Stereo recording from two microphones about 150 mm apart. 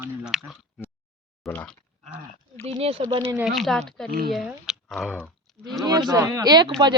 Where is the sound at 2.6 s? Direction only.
40° right (ahead or behind).